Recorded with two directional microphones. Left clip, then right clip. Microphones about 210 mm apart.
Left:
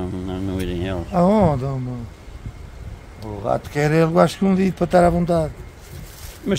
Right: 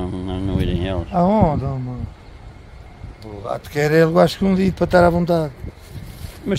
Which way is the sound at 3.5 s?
35° right (ahead or behind).